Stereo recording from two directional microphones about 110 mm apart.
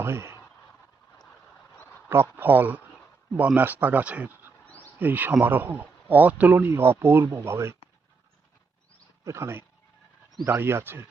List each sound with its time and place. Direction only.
0.0 s speech: 25° right (ahead or behind)
1.8 s a sound: 20° left (ahead or behind)
2.0 s speech: 20° right (ahead or behind)
4.7 s a sound: 15° left (ahead or behind)
4.9 s speech: 15° right (ahead or behind)
9.2 s speech: 25° right (ahead or behind)